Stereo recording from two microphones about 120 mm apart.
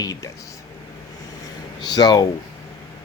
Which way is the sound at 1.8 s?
35° left (ahead or behind).